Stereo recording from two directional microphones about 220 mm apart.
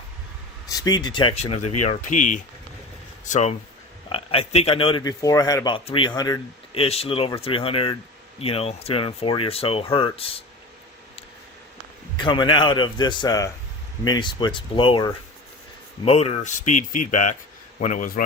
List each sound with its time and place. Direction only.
0.7 s speech: 15° left (ahead or behind)
12.2 s speech: 20° left (ahead or behind); by 18.2 s 40° left (ahead or behind)